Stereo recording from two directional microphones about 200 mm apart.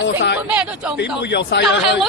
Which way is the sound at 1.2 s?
55° left (ahead or behind).